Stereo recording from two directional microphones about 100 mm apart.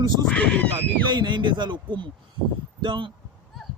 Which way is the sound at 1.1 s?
50° right (ahead or behind).